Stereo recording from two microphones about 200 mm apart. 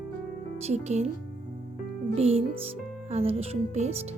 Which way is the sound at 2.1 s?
30° right (ahead or behind).